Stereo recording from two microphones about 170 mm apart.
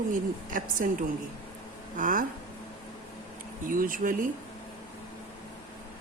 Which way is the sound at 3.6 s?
55° right (ahead or behind).